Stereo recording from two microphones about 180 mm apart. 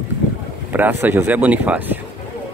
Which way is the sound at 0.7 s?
10° right (ahead or behind).